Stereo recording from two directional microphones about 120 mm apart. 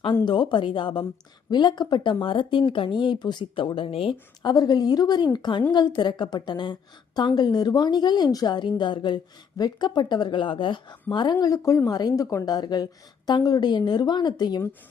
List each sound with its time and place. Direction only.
0.3 s a woman's voice: 40° left (ahead or behind)
4.5 s a woman's voice: 35° left (ahead or behind)